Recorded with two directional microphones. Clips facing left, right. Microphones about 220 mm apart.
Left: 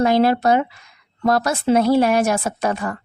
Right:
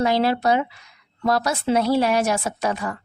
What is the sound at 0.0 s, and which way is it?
A woman's voice, 50° left (ahead or behind).